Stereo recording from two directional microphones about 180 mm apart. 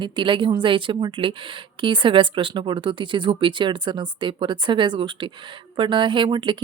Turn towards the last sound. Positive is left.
turn(degrees=-25)  # may be behind; listen again after turning